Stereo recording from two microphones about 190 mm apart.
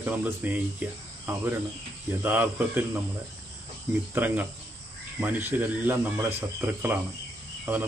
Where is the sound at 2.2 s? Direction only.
10° right (ahead or behind).